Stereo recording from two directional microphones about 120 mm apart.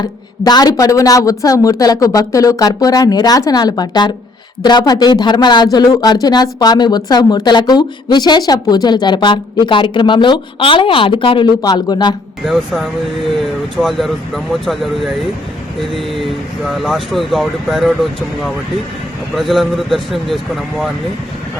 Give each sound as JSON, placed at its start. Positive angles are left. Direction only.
{"t": 0.0, "sound": "speech", "side_deg": 35}
{"t": 11.6, "sound": "speech", "side_deg": 35}
{"t": 12.5, "sound": "speech", "side_deg": 0}